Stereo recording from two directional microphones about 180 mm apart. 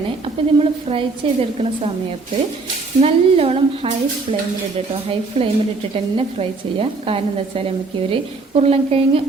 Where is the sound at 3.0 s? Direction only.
35° right (ahead or behind).